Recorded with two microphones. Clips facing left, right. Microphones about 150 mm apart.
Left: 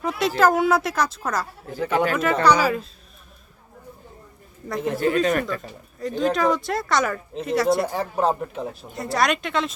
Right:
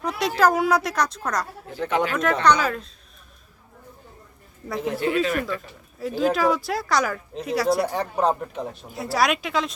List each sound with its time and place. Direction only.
0.0 s speech: centre (ahead or behind)
4.7 s speech: centre (ahead or behind)
5.2 s speech: 45° left (ahead or behind)
5.5 s speech: 5° right (ahead or behind)